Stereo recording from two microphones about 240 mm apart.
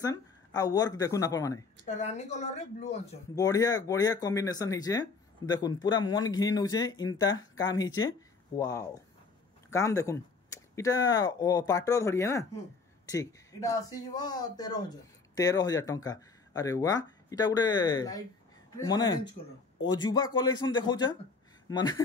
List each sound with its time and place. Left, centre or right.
0.0 s speech: centre
1.9 s speech: left
3.3 s speech: centre